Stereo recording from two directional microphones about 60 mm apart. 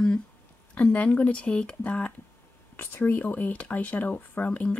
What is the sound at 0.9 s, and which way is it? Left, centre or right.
Speech, left.